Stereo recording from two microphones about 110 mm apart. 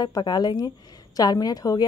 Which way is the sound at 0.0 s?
40° left (ahead or behind).